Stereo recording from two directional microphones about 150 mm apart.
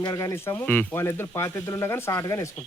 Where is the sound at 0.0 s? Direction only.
20° left (ahead or behind).